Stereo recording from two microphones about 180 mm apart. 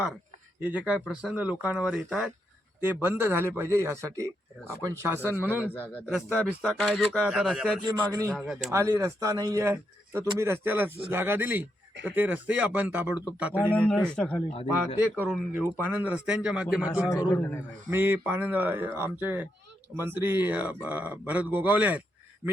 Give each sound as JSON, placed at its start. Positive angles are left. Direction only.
{"t": 0.6, "sound": "speech", "side_deg": -5}
{"t": 2.8, "sound": "a man's voice", "side_deg": -10}
{"t": 5.7, "sound": "speech", "side_deg": 10}
{"t": 6.1, "sound": "speech", "side_deg": -5}
{"t": 7.8, "sound": "a man's voice", "side_deg": -20}
{"t": 8.3, "sound": "speech", "side_deg": 0}
{"t": 8.7, "sound": "a man's voice", "side_deg": -15}
{"t": 13.7, "sound": "speech", "side_deg": 5}
{"t": 14.7, "sound": "a man's voice", "side_deg": -10}
{"t": 17.2, "sound": "speech", "side_deg": 10}
{"t": 17.9, "sound": "a man's voice", "side_deg": -10}